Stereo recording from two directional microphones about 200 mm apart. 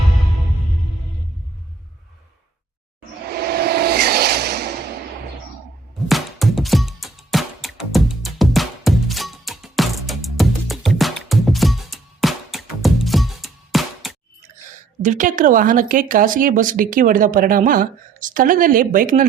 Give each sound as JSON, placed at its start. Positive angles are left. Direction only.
{"t": 3.3, "sound": "a sound", "side_deg": -50}
{"t": 6.1, "sound": "music", "side_deg": 0}
{"t": 15.0, "sound": "speech", "side_deg": -40}